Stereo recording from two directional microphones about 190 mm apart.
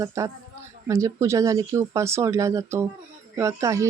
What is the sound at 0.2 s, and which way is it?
Speech, 15° right (ahead or behind).